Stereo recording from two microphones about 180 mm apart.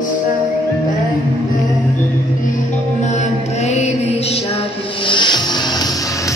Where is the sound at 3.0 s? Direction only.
40° left (ahead or behind); by 6.3 s 20° left (ahead or behind).